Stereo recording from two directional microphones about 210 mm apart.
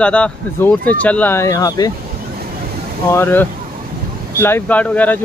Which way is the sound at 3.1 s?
10° left (ahead or behind).